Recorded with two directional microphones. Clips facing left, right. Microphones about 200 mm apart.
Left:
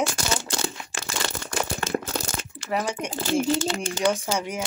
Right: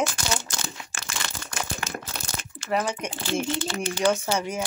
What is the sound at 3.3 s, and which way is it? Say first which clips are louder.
Speech: left 4 dB; 45° left (ahead or behind).